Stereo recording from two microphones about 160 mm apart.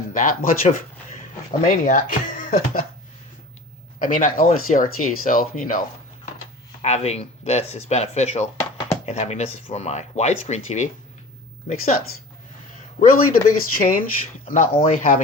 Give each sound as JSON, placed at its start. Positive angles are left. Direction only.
{"t": 0.1, "sound": "speech", "side_deg": 55}
{"t": 4.0, "sound": "speech", "side_deg": 60}
{"t": 6.8, "sound": "speech", "side_deg": 40}
{"t": 13.0, "sound": "speech", "side_deg": 65}
{"t": 14.8, "sound": "speech", "side_deg": 45}